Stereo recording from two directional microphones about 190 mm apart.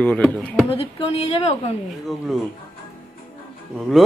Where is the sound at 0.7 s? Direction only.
30° left (ahead or behind).